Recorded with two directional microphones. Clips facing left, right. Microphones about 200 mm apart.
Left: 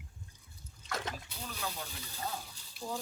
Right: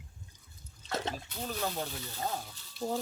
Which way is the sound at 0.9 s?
25° right (ahead or behind).